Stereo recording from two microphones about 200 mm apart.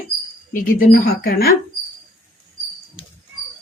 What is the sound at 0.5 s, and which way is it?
Speech, 45° left (ahead or behind).